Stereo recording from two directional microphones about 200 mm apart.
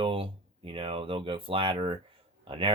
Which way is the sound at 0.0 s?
25° right (ahead or behind).